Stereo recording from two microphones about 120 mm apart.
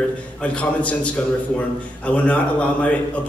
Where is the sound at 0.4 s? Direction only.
10° left (ahead or behind).